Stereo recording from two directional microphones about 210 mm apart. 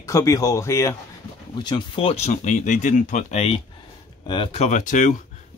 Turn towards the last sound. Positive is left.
turn(degrees=35)  # may be behind; listen again after turning